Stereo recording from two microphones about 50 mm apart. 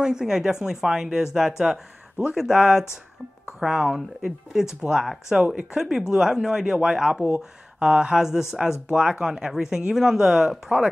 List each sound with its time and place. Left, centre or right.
0.0 s speech: centre
3.9 s speech: centre
5.4 s speech: centre